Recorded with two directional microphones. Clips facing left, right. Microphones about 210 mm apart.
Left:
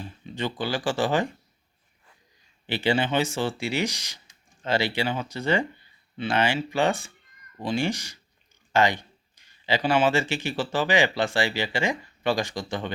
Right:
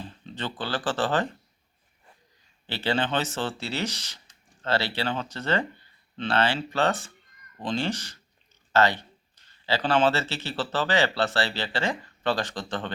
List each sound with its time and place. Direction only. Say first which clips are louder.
0.3 s speech: left 3 dB; 10° left (ahead or behind)
2.6 s speech: left 3 dB; 15° left (ahead or behind)